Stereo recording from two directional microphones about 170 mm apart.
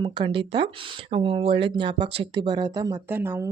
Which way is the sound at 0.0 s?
30° right (ahead or behind).